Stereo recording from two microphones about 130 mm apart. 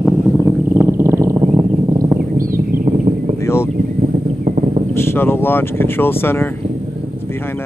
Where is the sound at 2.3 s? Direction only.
90° right.